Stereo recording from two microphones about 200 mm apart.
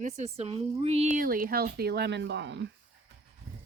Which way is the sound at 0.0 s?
30° right (ahead or behind).